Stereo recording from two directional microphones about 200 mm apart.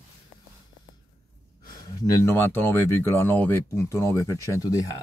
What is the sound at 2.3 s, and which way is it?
Mantra, 10° left (ahead or behind).